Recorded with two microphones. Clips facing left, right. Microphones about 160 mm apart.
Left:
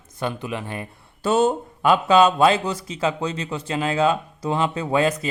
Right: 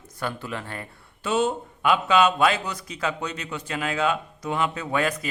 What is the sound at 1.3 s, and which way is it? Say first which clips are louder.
Speech: left 5 dB; 40° left (ahead or behind).